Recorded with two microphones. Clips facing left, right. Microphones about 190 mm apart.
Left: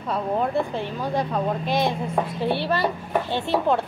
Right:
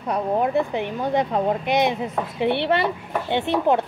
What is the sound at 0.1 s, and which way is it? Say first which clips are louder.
A woman's voice: right 3 dB; 15° right (ahead or behind).